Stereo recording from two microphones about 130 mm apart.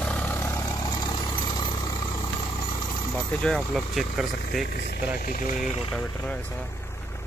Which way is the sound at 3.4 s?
5° left (ahead or behind).